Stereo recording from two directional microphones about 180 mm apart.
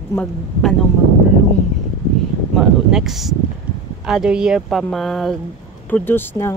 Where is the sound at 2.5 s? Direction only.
5° right (ahead or behind).